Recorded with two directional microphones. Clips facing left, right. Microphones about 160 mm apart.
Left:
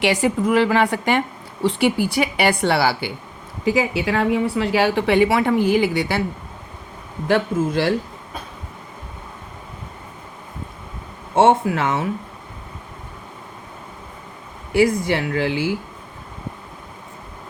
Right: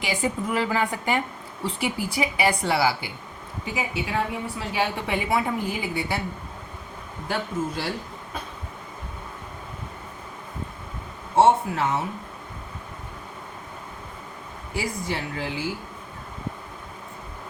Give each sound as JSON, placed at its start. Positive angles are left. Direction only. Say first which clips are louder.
{"t": 0.0, "sound": "a woman's voice", "louder": "left 8 dB", "side_deg": 80}
{"t": 1.6, "sound": "a woman's voice", "louder": "left 9 dB", "side_deg": 75}
{"t": 3.8, "sound": "a woman's voice", "louder": "left 5 dB", "side_deg": 90}
{"t": 7.3, "sound": "a woman's voice", "louder": "left 9 dB", "side_deg": 85}
{"t": 11.3, "sound": "speech", "louder": "left 3 dB", "side_deg": 90}
{"t": 14.7, "sound": "a woman's voice", "louder": "left 12 dB", "side_deg": 90}